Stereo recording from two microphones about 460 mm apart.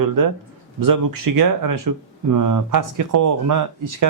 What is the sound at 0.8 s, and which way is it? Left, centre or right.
A man's voice, right.